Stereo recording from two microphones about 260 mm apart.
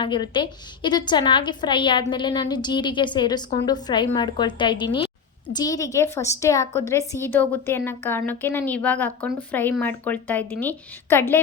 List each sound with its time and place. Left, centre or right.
0.0 s a woman's voice: centre